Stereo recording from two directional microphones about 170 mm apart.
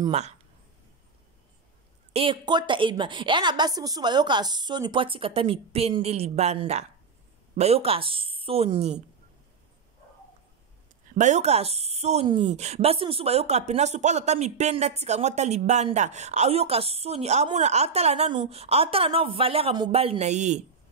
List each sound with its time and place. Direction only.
2.1 s a woman's voice: 30° right (ahead or behind)
11.1 s a woman's voice: 45° right (ahead or behind)